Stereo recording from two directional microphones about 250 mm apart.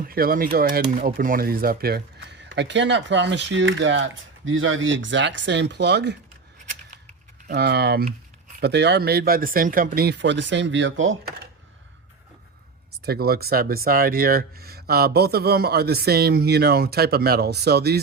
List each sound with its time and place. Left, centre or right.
0.1 s speech: right
7.4 s speech: right
13.1 s speech: right